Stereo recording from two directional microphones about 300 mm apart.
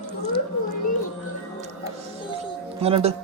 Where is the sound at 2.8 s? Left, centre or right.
Centre.